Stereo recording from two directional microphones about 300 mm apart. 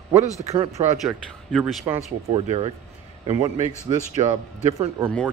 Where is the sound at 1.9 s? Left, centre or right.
Centre.